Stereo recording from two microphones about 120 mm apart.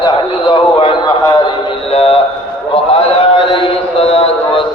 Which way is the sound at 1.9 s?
55° left (ahead or behind).